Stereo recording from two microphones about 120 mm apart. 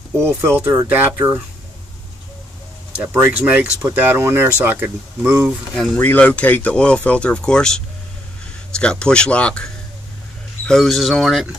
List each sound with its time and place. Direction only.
0.2 s speech: 20° right (ahead or behind)
3.0 s speech: 15° right (ahead or behind)
5.9 s speech: 15° left (ahead or behind)
9.0 s speech: 10° left (ahead or behind)
10.7 s speech: centre (ahead or behind)